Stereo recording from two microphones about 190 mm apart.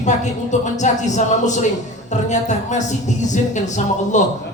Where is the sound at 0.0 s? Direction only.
40° left (ahead or behind).